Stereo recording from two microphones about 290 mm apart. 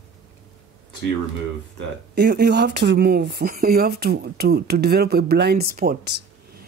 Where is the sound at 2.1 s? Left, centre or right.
Right.